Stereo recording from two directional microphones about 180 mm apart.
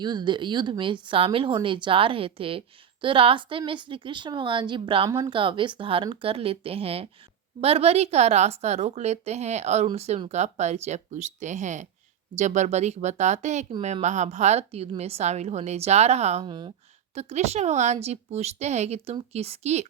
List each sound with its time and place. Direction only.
0.0 s a woman's voice: 25° right (ahead or behind)
16.5 s speech: 25° right (ahead or behind)
17.2 s a woman's voice: 35° right (ahead or behind)